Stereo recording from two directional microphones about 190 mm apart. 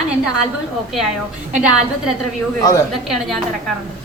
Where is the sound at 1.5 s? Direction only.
5° right (ahead or behind).